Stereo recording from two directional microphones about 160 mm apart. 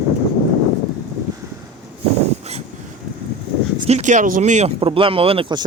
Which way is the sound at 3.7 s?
40° right (ahead or behind).